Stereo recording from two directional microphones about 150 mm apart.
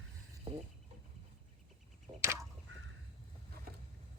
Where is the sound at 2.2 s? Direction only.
15° right (ahead or behind).